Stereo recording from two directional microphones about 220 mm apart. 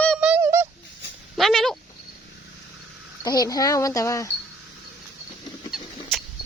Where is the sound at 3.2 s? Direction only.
15° left (ahead or behind).